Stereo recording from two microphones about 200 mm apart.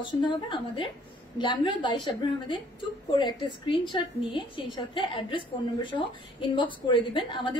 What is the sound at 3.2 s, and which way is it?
A woman's voice, 25° left (ahead or behind).